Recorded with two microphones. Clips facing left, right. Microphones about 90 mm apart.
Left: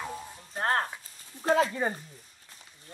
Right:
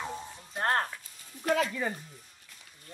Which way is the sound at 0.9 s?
30° left (ahead or behind).